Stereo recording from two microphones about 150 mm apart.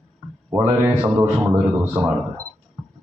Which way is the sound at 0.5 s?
15° right (ahead or behind).